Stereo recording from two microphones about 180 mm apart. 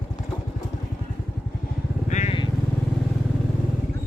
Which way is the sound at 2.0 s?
40° left (ahead or behind).